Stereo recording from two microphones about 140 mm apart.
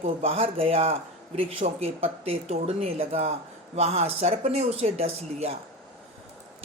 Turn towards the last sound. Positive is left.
turn(degrees=-45)  # may be behind; listen again after turning